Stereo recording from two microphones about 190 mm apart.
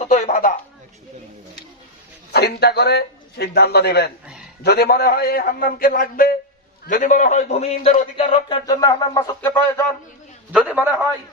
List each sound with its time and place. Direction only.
0.0 s a sound: 40° left (ahead or behind)
2.3 s a man's voice: 60° left (ahead or behind); by 9.8 s 10° left (ahead or behind)
10.7 s a man's voice: 10° right (ahead or behind)